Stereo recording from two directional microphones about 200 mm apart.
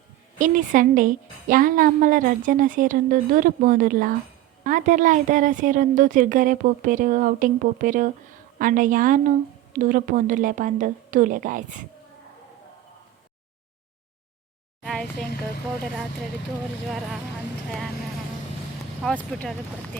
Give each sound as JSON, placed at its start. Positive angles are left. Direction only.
{"t": 0.3, "sound": "a woman's voice", "side_deg": -40}
{"t": 14.8, "sound": "a sound", "side_deg": 0}
{"t": 16.8, "sound": "speech", "side_deg": 0}
{"t": 19.0, "sound": "speech", "side_deg": 5}